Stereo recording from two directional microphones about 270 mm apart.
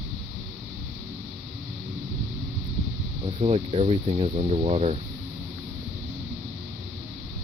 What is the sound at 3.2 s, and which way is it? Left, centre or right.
Speech, right.